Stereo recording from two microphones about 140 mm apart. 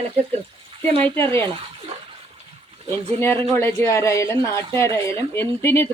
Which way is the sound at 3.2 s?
20° left (ahead or behind).